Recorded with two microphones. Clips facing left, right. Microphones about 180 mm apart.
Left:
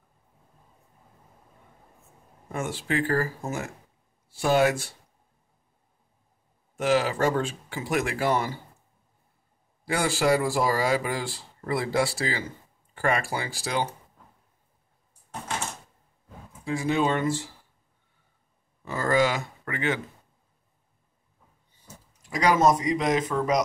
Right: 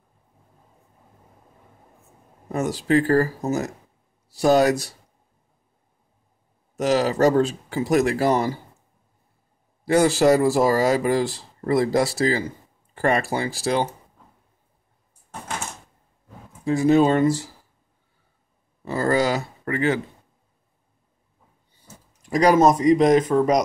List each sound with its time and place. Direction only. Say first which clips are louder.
2.5 s speech: right 8 dB; 40° right (ahead or behind)
6.8 s speech: right 5 dB; 40° right (ahead or behind)
9.8 s speech: right 7 dB; 40° right (ahead or behind)
16.6 s speech: right 8 dB; 40° right (ahead or behind)
18.9 s speech: right 3 dB; 35° right (ahead or behind)
22.3 s speech: right 5 dB; 40° right (ahead or behind)